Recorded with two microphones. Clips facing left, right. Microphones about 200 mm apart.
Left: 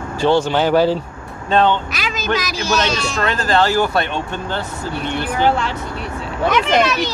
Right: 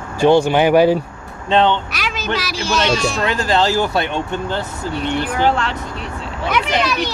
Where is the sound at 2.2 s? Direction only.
10° right (ahead or behind).